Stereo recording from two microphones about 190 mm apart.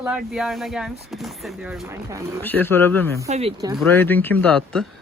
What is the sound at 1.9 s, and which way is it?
Speech, 15° right (ahead or behind).